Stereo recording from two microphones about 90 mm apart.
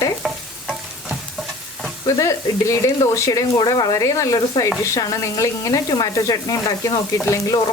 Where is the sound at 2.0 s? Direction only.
35° left (ahead or behind).